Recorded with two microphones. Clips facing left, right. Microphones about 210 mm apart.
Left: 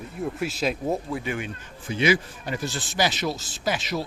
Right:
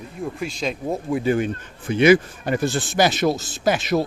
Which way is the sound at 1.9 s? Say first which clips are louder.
Right 8 dB; 55° right (ahead or behind).